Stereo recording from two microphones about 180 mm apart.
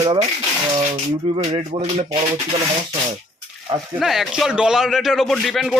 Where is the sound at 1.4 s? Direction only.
35° right (ahead or behind).